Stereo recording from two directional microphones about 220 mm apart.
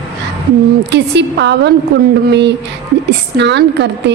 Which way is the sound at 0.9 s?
50° right (ahead or behind).